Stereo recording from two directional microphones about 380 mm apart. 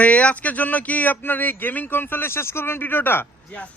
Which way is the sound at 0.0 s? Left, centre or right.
Centre.